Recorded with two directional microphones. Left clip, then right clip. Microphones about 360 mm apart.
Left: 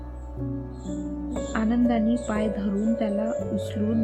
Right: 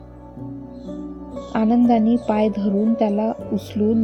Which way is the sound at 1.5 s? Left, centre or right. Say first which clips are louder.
Right 8 dB; centre.